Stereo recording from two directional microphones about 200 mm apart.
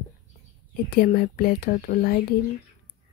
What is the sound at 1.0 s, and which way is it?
Speech, 45° left (ahead or behind).